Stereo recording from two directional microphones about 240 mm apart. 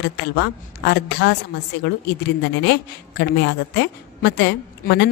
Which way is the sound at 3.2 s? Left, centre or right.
Left.